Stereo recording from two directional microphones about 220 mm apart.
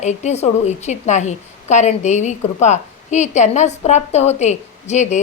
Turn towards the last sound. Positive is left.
turn(degrees=30)  # may be behind; listen again after turning